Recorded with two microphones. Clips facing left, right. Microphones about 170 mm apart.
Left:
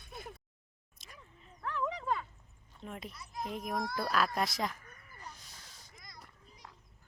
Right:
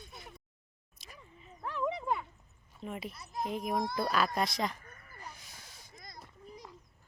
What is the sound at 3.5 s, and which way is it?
Speech, centre (ahead or behind).